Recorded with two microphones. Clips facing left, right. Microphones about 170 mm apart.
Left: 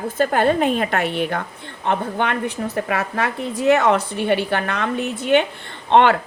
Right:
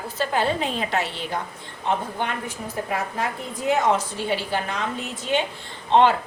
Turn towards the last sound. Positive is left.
turn(degrees=65)  # may be behind; listen again after turning